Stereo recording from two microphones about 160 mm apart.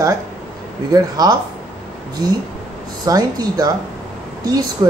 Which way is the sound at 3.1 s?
25° right (ahead or behind).